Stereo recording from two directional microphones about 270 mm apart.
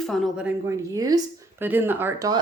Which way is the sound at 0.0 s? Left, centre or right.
Centre.